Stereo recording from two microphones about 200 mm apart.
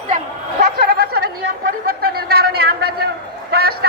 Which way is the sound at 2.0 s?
50° right (ahead or behind).